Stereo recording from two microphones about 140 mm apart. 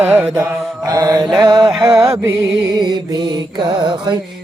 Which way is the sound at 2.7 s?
30° right (ahead or behind).